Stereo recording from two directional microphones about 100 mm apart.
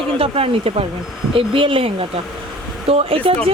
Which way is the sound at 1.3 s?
60° right (ahead or behind).